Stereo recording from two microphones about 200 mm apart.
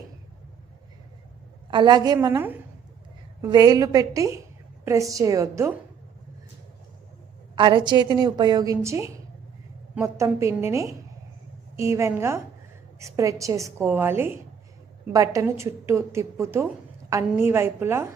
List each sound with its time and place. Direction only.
1.7 s a woman's voice: 20° right (ahead or behind)
7.5 s a woman's voice: 25° right (ahead or behind)